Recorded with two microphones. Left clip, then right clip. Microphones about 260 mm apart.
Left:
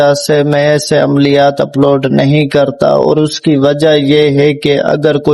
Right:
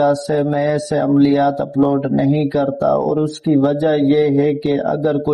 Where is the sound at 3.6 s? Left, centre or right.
Left.